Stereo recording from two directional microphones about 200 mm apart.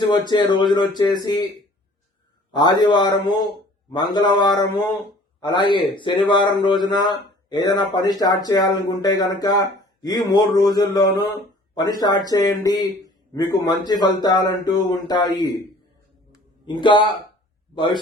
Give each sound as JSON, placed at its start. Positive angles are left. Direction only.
{"t": 0.1, "sound": "a man's voice", "side_deg": 20}
{"t": 2.5, "sound": "a man's voice", "side_deg": 20}
{"t": 16.8, "sound": "a man's voice", "side_deg": 25}